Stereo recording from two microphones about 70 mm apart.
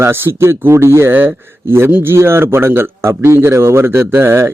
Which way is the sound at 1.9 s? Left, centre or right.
Right.